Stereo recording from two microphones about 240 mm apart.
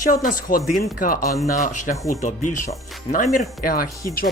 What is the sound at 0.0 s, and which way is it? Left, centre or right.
Speech, left.